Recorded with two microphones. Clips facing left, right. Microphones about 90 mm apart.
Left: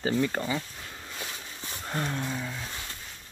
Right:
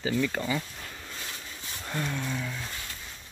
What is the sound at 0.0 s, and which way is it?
Speech, 30° left (ahead or behind).